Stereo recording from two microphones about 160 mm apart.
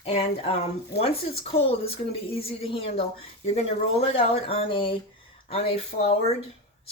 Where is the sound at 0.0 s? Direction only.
35° left (ahead or behind).